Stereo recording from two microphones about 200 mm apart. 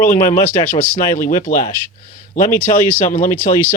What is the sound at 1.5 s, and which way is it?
Speech, 40° left (ahead or behind).